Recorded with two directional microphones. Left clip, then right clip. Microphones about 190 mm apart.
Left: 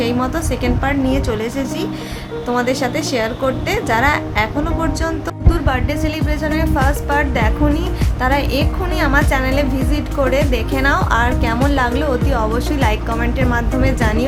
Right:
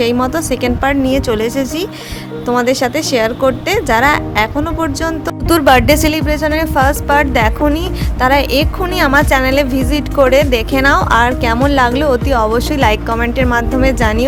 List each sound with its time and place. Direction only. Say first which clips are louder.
0.0 s a woman's voice: right 5 dB; 50° right (ahead or behind)